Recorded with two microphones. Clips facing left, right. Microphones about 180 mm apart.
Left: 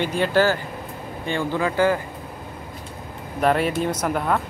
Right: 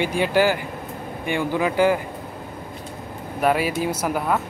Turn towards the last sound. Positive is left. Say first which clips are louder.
# even
turn(degrees=-5)  # may be behind; listen again after turning